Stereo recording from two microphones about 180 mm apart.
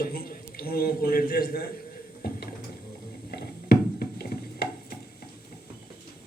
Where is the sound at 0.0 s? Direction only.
55° left (ahead or behind).